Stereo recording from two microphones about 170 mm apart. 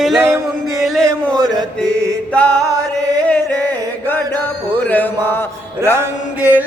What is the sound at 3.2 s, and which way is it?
Chant, 5° left (ahead or behind).